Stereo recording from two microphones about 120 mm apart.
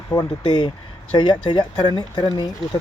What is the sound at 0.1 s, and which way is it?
Speech, 30° left (ahead or behind).